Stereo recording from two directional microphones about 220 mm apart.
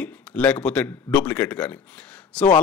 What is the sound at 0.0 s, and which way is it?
A man's voice, 5° left (ahead or behind).